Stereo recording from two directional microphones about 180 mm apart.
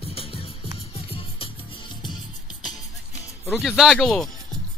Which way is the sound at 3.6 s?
Centre (ahead or behind).